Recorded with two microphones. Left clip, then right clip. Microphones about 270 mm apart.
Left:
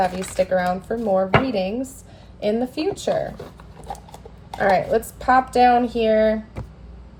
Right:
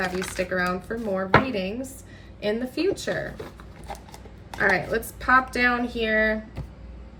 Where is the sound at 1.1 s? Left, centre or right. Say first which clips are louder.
Left 3 dB; centre.